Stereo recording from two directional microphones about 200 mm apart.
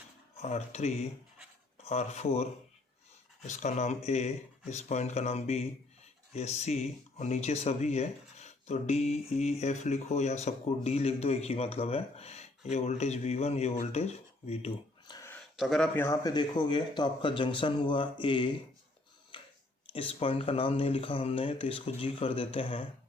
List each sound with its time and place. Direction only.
0.4 s speech: 35° left (ahead or behind)
15.5 s speech: centre (ahead or behind)
16.0 s speech: 15° left (ahead or behind)
19.3 s a sound: 25° left (ahead or behind)
19.9 s speech: 30° left (ahead or behind)